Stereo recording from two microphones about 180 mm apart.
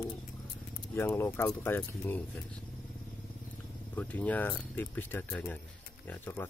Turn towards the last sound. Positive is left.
turn(degrees=10)  # may be behind; listen again after turning